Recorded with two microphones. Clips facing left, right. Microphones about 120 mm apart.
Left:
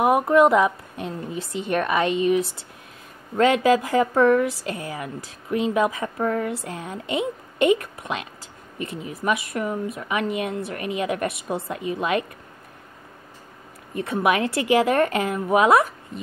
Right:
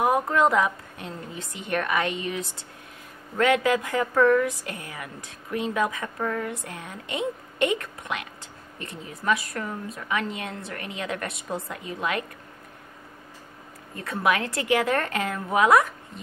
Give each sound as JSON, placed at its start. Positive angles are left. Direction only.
{"t": 0.0, "sound": "a woman's voice", "side_deg": 20}
{"t": 9.0, "sound": "a woman's voice", "side_deg": 20}
{"t": 13.9, "sound": "a woman's voice", "side_deg": 20}